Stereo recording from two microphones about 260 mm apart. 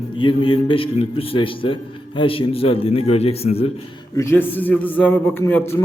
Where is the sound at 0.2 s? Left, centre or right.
Centre.